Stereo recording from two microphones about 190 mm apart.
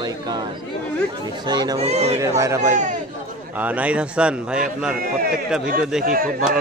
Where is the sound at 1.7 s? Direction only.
35° right (ahead or behind).